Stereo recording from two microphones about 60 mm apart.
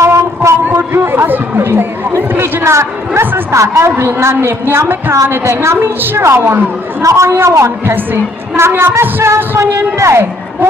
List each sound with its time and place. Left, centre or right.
0.0 s a sound: right
0.7 s chatter: right
1.7 s a woman's voice: right
5.3 s a woman's voice: right
7.0 s a woman's voice: right
7.2 s a woman's voice: right
7.9 s speech: right
8.6 s a woman's voice: right